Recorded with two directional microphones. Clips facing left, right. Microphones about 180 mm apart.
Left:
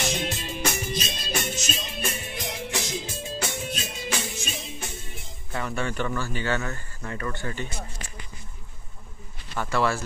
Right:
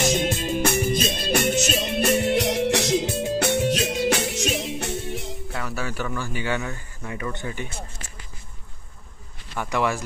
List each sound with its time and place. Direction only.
0.0 s music: 45° right (ahead or behind); by 5.3 s 70° right (ahead or behind)
5.5 s speech: 5° right (ahead or behind)
9.6 s speech: 15° right (ahead or behind)